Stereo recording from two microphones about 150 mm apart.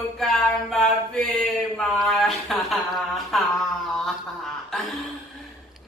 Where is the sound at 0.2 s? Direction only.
Centre (ahead or behind).